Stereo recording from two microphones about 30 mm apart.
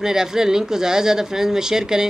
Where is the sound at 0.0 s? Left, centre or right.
Centre.